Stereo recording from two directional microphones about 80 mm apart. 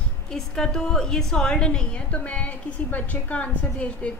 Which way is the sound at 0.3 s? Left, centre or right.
Centre.